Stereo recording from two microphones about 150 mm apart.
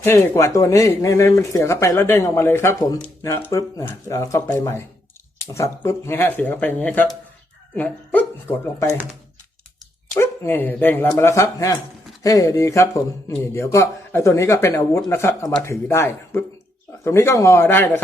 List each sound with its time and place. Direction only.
0.0 s speech: 15° left (ahead or behind)
10.2 s speech: 15° left (ahead or behind)